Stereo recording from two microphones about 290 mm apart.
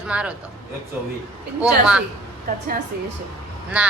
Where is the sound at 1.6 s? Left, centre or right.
Centre.